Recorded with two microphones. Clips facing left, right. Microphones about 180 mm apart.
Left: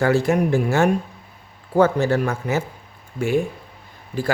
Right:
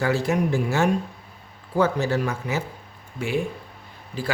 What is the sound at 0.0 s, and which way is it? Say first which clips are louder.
Speech: left 4 dB; 50° left (ahead or behind).